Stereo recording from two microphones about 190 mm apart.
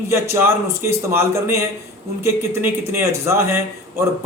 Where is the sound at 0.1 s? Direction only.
15° right (ahead or behind).